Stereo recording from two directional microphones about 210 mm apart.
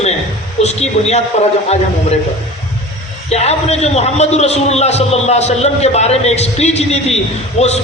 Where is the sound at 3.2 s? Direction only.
30° left (ahead or behind).